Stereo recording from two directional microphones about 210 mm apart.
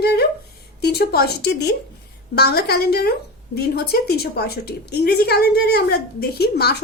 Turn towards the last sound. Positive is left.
turn(degrees=50)  # may be behind; listen again after turning